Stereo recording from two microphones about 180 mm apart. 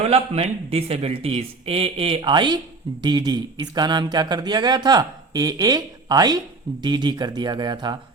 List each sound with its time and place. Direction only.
0.0 s a man's voice: 35° right (ahead or behind)